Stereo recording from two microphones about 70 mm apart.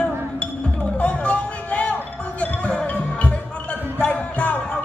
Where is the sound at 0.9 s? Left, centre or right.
Centre.